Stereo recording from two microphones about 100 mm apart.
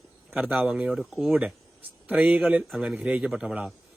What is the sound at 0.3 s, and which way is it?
Speech, 20° right (ahead or behind).